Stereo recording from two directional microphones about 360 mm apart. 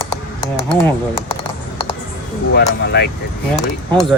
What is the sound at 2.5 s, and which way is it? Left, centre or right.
Speech, left.